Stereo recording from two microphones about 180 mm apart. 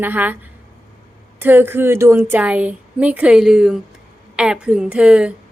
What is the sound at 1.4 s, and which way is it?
A woman's voice, 10° right (ahead or behind).